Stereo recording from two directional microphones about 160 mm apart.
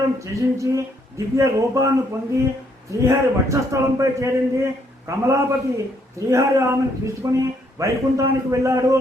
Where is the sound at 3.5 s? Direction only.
20° right (ahead or behind).